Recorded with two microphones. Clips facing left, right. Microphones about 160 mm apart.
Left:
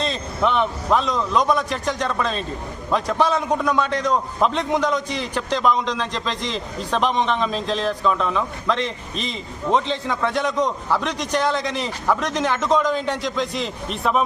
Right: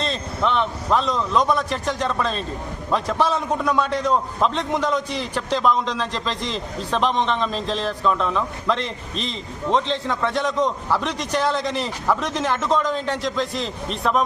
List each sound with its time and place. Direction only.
0.0 s a man's voice: 5° left (ahead or behind)